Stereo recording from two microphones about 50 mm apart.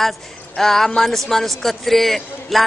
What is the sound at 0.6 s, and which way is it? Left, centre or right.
A man's voice, centre.